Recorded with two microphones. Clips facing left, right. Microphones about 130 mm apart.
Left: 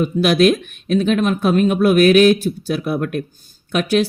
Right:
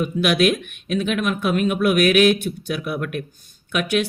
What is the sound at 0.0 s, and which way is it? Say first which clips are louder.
Speech: left 4 dB; 35° left (ahead or behind).